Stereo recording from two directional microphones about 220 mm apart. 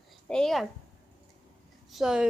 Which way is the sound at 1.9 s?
Centre (ahead or behind).